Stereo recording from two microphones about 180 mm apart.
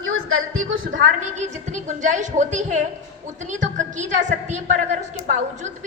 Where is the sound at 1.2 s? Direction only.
40° right (ahead or behind).